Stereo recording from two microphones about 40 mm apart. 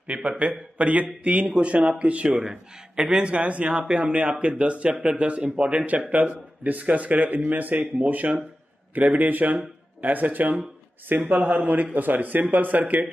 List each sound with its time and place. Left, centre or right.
0.0 s a man's voice: right
2.4 s a man's voice: centre
3.2 s speech: right